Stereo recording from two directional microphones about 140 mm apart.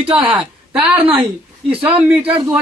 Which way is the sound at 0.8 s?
10° right (ahead or behind).